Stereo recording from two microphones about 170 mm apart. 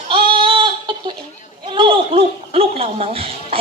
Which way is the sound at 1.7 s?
30° right (ahead or behind).